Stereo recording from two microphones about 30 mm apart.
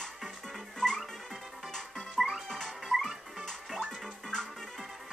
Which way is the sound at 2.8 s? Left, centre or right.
Centre.